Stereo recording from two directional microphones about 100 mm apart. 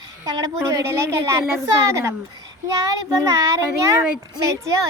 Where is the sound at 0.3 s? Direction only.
35° right (ahead or behind).